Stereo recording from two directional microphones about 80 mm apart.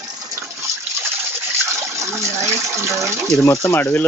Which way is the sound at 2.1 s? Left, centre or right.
Right.